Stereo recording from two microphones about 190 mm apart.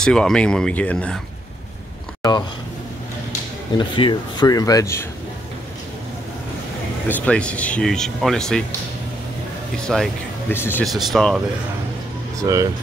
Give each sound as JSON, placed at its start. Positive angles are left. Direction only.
{"t": 0.0, "sound": "speech", "side_deg": 5}
{"t": 3.7, "sound": "speech", "side_deg": 25}
{"t": 7.1, "sound": "speech", "side_deg": 10}
{"t": 9.9, "sound": "speech", "side_deg": 0}
{"t": 10.5, "sound": "speech", "side_deg": 10}
{"t": 10.9, "sound": "speech", "side_deg": 0}
{"t": 12.4, "sound": "speech", "side_deg": -15}